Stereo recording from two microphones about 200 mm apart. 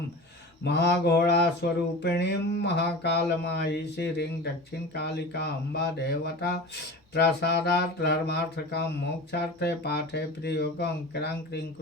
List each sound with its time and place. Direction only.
0.6 s mantra: 55° left (ahead or behind)
1.6 s a sound: 55° left (ahead or behind)
2.0 s mantra: 60° left (ahead or behind)